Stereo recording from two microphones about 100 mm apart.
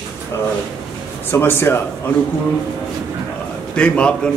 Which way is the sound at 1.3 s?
20° left (ahead or behind).